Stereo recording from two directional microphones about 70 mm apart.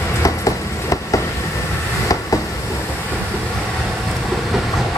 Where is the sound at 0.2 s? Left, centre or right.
Left.